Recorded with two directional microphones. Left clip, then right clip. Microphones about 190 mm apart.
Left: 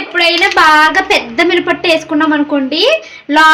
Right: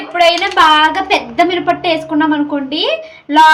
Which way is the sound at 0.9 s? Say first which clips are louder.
Left 3 dB; 50° left (ahead or behind).